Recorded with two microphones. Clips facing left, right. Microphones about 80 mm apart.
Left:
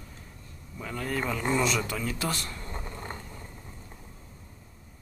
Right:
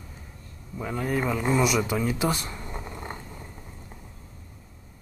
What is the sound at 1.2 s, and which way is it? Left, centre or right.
Speech, centre.